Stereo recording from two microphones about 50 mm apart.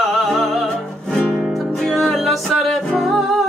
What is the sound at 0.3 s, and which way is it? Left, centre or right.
Music, centre.